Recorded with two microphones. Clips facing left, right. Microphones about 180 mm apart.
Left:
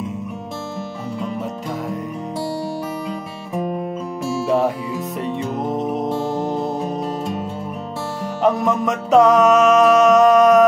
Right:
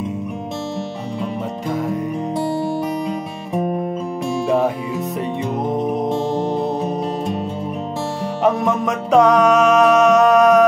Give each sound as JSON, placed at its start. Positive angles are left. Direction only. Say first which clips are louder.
{"t": 4.5, "sound": "music", "louder": "even", "side_deg": 0}
{"t": 6.0, "sound": "music", "louder": "right 2 dB", "side_deg": -20}
{"t": 8.4, "sound": "music", "louder": "even", "side_deg": 0}